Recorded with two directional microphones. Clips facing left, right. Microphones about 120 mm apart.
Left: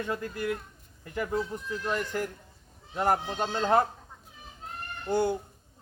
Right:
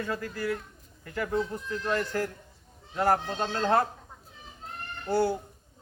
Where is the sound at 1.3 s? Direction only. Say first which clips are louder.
Right 3 dB; 5° left (ahead or behind).